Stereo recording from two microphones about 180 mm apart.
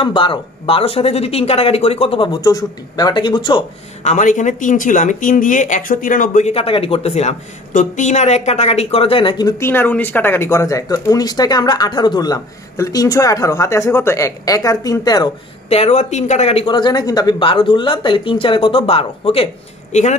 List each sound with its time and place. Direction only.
0.0 s speech: 30° left (ahead or behind)
4.0 s speech: 40° left (ahead or behind); by 15.3 s 20° left (ahead or behind)
15.7 s speech: 35° left (ahead or behind)